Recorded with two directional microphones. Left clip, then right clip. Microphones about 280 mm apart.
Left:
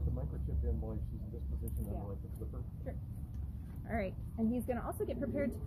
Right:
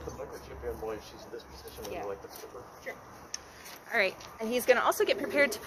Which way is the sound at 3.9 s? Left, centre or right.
Right.